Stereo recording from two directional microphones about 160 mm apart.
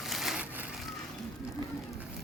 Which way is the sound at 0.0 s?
Centre (ahead or behind).